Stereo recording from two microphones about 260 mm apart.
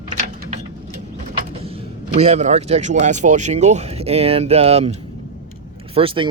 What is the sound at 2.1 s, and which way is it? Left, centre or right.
Speech, right.